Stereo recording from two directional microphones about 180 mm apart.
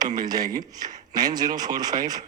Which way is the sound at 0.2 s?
20° right (ahead or behind).